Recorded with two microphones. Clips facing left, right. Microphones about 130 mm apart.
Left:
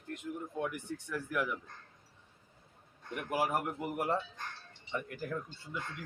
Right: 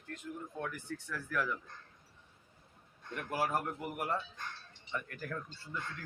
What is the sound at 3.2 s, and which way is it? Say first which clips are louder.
Speech: left 2 dB; 15° left (ahead or behind).